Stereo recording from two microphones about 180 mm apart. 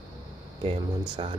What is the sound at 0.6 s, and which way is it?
Speech, 25° right (ahead or behind).